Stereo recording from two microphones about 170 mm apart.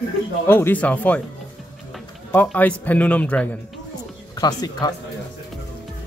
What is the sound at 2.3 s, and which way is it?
Speech, 10° left (ahead or behind).